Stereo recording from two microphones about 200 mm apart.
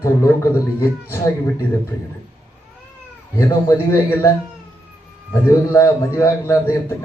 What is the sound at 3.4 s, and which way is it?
Speech, 15° left (ahead or behind).